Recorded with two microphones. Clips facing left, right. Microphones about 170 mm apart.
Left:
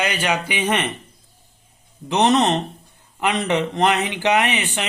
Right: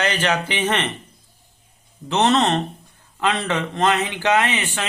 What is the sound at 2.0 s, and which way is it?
A man's voice, 15° left (ahead or behind).